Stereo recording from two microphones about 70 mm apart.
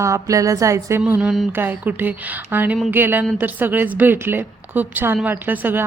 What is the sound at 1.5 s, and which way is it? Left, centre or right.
A woman's voice, right.